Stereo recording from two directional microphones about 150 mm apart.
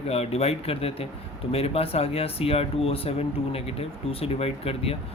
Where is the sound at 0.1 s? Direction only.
45° left (ahead or behind).